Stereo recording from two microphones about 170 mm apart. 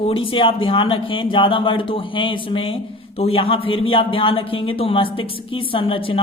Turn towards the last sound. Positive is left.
turn(degrees=30)  # may be behind; listen again after turning